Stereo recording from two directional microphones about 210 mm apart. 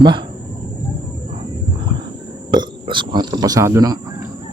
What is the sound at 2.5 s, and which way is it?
Speech, 20° right (ahead or behind).